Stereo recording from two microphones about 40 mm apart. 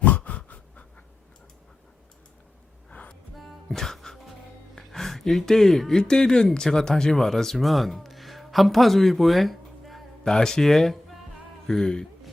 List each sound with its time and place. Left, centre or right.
0.0 s dog: left
2.9 s music: left
3.3 s music: centre
4.7 s gasp: centre
6.0 s speech: centre
10.3 s speech: centre